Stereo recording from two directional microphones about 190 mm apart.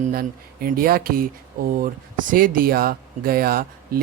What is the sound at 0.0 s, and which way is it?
Speech, 50° right (ahead or behind).